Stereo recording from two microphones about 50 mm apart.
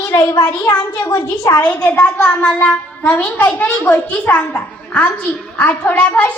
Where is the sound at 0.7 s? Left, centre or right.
Left.